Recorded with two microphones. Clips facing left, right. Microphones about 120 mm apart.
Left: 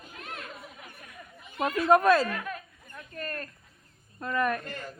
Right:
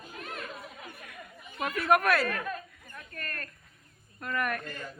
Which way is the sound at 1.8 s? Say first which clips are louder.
Left 4 dB; 25° left (ahead or behind).